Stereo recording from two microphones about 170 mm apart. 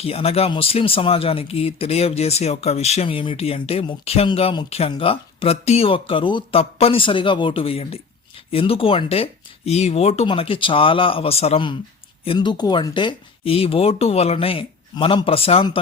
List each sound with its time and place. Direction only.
0.0 s speech: 35° left (ahead or behind)